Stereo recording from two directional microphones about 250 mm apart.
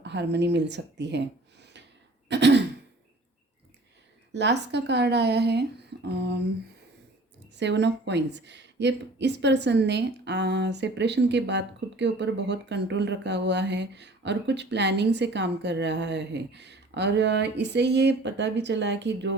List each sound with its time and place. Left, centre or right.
0.0 s a woman's voice: right
2.3 s a woman's voice: right
4.3 s a woman's voice: right
7.5 s a woman's voice: right